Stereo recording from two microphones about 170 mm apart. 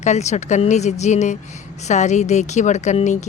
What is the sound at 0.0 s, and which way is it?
Speech, 40° left (ahead or behind).